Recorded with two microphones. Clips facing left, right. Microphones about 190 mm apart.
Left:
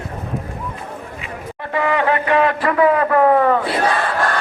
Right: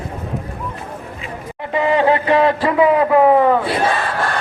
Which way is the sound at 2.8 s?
15° right (ahead or behind).